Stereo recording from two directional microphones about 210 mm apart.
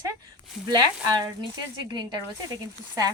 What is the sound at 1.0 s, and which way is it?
Speech, 20° right (ahead or behind).